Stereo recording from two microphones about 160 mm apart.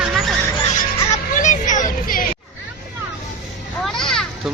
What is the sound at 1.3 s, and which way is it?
Hubbub, 50° left (ahead or behind).